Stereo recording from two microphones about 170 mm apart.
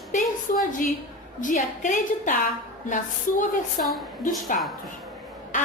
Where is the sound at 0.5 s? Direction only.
50° left (ahead or behind).